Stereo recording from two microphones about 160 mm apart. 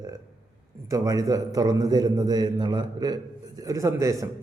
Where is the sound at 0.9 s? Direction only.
20° right (ahead or behind).